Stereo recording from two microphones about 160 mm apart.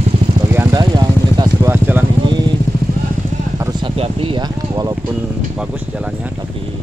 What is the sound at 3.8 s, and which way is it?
Speech, 35° right (ahead or behind).